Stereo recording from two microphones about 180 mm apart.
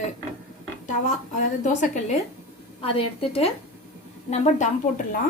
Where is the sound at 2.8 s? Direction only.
30° left (ahead or behind).